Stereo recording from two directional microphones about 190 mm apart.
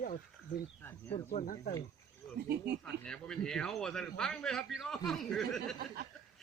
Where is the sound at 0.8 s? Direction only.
10° left (ahead or behind).